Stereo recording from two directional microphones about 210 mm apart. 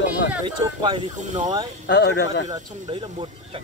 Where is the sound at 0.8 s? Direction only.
25° right (ahead or behind).